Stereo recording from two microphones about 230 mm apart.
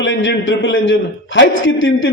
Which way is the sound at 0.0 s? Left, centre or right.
Left.